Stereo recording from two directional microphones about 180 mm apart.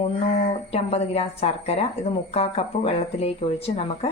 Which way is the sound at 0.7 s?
35° left (ahead or behind).